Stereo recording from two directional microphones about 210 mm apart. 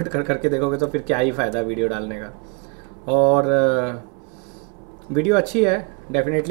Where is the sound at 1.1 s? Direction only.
Centre (ahead or behind).